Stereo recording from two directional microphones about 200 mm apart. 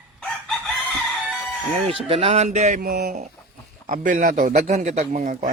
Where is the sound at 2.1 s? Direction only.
30° right (ahead or behind).